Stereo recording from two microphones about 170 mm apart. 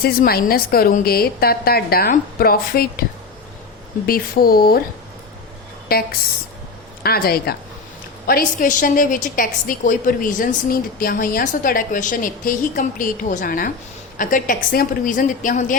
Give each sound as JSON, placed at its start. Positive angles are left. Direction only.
{"t": 0.0, "sound": "a woman's voice", "side_deg": 65}
{"t": 4.0, "sound": "a woman's voice", "side_deg": 60}
{"t": 5.9, "sound": "a woman's voice", "side_deg": 65}